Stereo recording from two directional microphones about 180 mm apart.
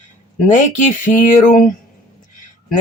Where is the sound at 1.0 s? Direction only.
45° left (ahead or behind).